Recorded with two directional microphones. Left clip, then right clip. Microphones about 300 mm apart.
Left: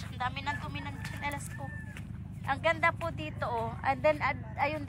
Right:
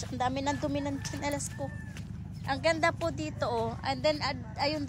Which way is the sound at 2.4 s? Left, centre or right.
Centre.